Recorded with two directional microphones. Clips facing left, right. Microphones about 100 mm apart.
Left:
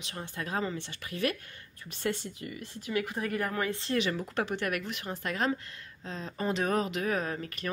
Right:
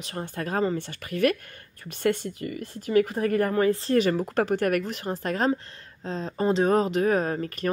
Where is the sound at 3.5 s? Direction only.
35° right (ahead or behind).